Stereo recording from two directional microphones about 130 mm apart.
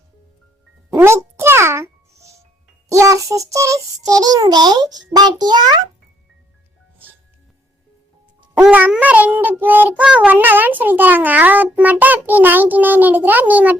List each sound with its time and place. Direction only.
0.9 s music: 20° right (ahead or behind)
2.9 s child singing: 25° right (ahead or behind)
8.5 s child singing: 10° right (ahead or behind)